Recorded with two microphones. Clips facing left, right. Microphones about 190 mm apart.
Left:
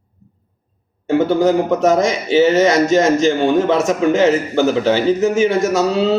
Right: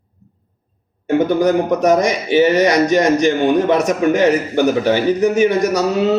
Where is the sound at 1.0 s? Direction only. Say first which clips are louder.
Even; 15° right (ahead or behind).